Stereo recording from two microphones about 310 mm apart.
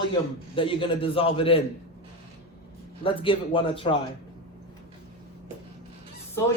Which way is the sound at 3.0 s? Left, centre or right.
Centre.